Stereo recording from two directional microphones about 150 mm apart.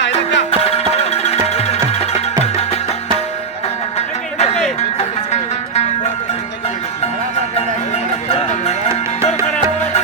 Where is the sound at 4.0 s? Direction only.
45° left (ahead or behind).